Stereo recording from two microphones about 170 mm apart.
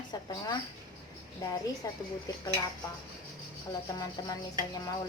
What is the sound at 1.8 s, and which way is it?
Speech, 20° left (ahead or behind).